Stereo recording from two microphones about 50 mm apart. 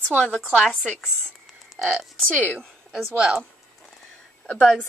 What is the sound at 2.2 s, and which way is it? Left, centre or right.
Speech, left.